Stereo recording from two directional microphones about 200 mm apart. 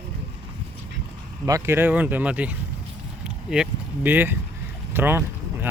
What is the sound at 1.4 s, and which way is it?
Speech, 15° right (ahead or behind).